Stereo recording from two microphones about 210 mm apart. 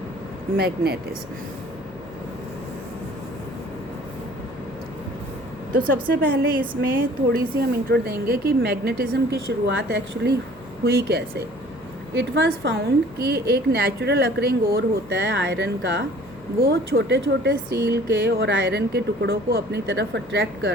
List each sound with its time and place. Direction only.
0.5 s speech: 50° right (ahead or behind)
5.7 s speech: 40° right (ahead or behind)